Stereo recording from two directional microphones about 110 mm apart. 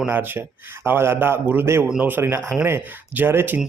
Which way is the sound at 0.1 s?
20° right (ahead or behind).